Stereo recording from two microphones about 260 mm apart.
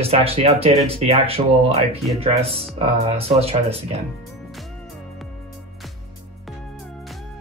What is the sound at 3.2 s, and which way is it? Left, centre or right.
Speech, right.